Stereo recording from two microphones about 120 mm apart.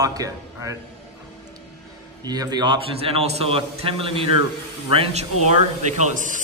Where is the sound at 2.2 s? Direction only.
35° right (ahead or behind).